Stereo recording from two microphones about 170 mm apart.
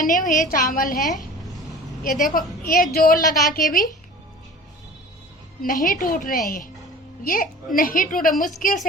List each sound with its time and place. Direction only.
0.0 s a woman's voice: 50° left (ahead or behind)
5.6 s a woman's voice: 50° left (ahead or behind)
7.8 s a woman's voice: 55° left (ahead or behind)